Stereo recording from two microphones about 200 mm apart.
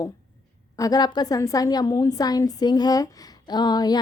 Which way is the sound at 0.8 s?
20° left (ahead or behind).